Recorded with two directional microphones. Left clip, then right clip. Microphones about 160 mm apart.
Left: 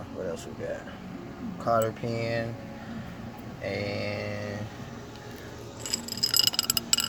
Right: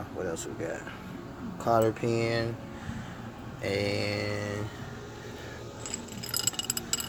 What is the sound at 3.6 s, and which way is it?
Speech, 65° right (ahead or behind).